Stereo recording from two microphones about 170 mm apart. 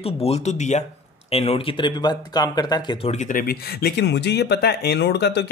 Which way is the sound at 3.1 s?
45° left (ahead or behind).